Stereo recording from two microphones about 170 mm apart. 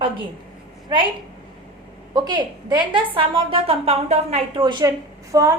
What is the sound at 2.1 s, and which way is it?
A woman's voice, 25° right (ahead or behind).